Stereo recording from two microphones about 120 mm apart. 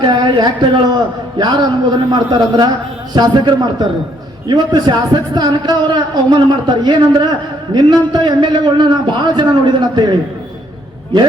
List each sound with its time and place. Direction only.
0.0 s a man's voice: 40° right (ahead or behind)